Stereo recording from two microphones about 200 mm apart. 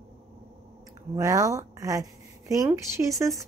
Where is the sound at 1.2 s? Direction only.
15° right (ahead or behind).